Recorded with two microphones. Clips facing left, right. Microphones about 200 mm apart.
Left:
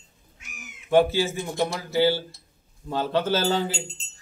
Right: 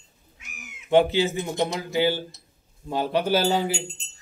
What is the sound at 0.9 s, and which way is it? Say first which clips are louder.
Speech: right 1 dB; 20° right (ahead or behind).